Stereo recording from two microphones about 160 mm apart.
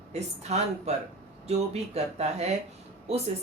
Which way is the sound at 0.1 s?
45° right (ahead or behind).